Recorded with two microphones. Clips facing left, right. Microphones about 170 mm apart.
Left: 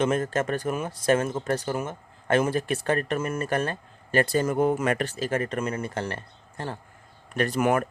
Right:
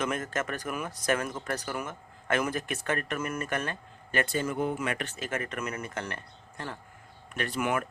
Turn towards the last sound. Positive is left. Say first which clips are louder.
# left 7 dB
turn(degrees=40)  # may be behind; listen again after turning